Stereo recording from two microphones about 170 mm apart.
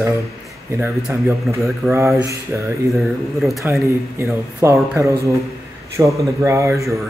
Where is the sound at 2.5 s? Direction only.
10° right (ahead or behind).